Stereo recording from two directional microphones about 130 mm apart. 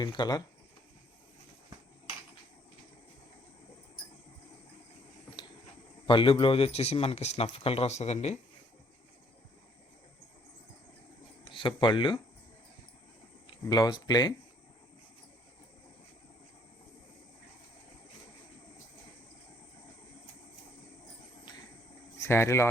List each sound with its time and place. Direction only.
0.0 s speech: 35° left (ahead or behind)
6.1 s speech: 40° left (ahead or behind)
11.4 s speech: 40° left (ahead or behind)
13.5 s speech: 30° left (ahead or behind)
22.2 s speech: 20° left (ahead or behind)